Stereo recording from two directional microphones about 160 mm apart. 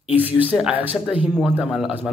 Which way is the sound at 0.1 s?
10° right (ahead or behind).